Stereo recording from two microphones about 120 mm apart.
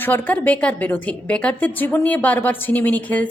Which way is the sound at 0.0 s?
15° left (ahead or behind).